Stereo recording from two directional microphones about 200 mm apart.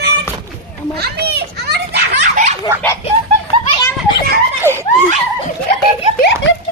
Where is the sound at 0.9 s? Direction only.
55° right (ahead or behind).